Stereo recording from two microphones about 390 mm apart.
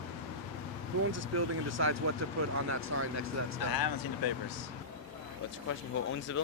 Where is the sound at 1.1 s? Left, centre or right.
Right.